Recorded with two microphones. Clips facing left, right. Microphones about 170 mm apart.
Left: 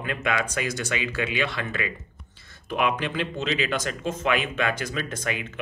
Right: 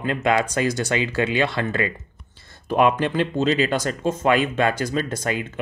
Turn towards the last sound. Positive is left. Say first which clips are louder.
# right 5 dB
turn(degrees=-35)  # may be behind; listen again after turning